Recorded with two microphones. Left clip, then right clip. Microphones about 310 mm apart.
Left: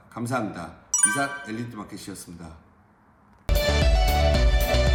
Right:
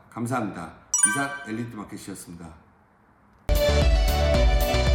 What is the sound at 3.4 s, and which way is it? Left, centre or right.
Music, centre.